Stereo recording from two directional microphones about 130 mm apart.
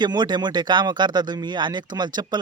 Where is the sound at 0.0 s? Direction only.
35° right (ahead or behind).